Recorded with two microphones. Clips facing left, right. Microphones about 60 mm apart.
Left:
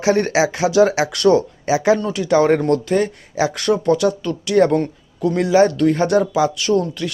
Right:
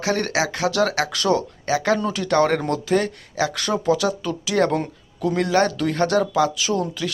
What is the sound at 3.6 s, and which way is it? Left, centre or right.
Speech, centre.